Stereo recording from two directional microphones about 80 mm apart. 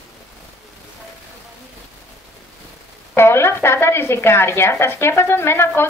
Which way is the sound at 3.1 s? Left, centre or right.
Left.